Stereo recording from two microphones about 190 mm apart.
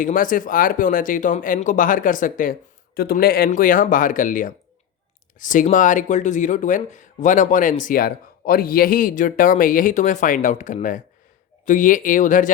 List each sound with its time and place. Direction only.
0.0 s speech: 45° left (ahead or behind)